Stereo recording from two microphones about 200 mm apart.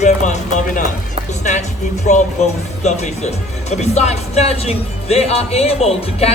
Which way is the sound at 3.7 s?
35° left (ahead or behind).